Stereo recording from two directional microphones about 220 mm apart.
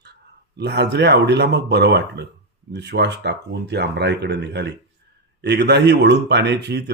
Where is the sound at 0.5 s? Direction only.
50° right (ahead or behind).